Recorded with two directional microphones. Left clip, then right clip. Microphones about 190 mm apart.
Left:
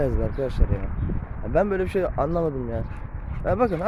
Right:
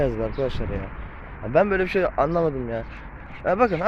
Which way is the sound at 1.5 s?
10° left (ahead or behind).